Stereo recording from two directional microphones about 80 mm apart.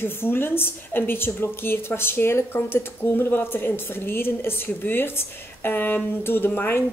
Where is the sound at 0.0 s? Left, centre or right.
Left.